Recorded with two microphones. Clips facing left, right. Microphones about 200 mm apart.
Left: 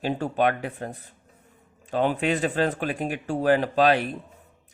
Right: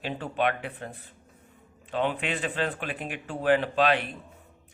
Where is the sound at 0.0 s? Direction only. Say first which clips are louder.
Left 5 dB; 40° left (ahead or behind).